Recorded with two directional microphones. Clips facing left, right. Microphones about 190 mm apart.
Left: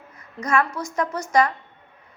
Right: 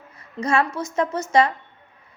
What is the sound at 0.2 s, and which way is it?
A woman's voice, 30° right (ahead or behind).